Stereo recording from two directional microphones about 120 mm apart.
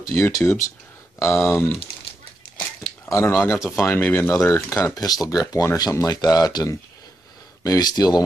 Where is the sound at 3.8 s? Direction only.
15° left (ahead or behind).